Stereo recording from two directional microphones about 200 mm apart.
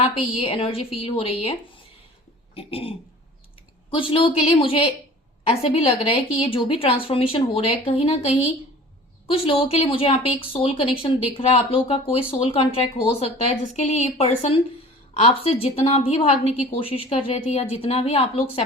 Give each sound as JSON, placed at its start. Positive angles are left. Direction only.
{"t": 0.0, "sound": "a woman's voice", "side_deg": 25}
{"t": 2.6, "sound": "speech", "side_deg": 30}